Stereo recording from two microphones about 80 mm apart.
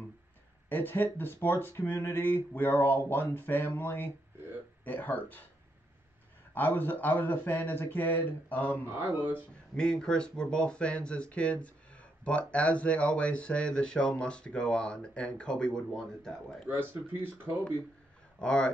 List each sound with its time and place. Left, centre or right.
0.7 s speech: left
6.5 s speech: left
8.9 s speech: right
9.8 s speech: centre
16.6 s speech: right
18.4 s speech: centre